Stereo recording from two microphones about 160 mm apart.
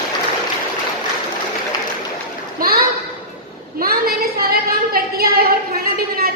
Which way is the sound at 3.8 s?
70° right (ahead or behind).